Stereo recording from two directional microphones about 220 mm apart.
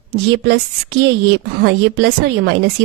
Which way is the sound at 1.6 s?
45° right (ahead or behind).